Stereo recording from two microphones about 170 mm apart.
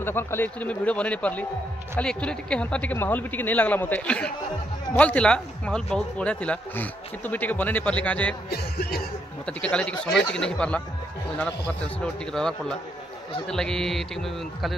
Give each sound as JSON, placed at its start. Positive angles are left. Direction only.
{"t": 0.0, "sound": "speech", "side_deg": 15}
{"t": 8.5, "sound": "speech", "side_deg": 65}
{"t": 9.5, "sound": "speech", "side_deg": 5}
{"t": 10.3, "sound": "music", "side_deg": 5}
{"t": 12.0, "sound": "music", "side_deg": 5}